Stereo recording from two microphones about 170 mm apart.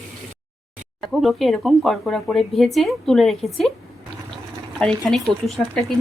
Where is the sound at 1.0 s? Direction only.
Centre (ahead or behind).